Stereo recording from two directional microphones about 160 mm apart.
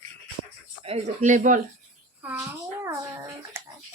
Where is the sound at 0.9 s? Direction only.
45° right (ahead or behind).